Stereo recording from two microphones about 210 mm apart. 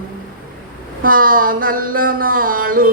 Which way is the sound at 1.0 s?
40° right (ahead or behind).